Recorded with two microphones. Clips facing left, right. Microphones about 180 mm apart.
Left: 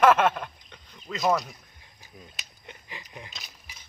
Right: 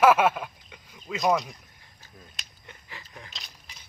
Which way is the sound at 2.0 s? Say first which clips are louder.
Left 2 dB; 10° left (ahead or behind).